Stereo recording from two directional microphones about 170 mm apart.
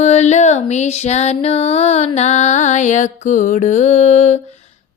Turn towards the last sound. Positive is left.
turn(degrees=40)  # may be behind; listen again after turning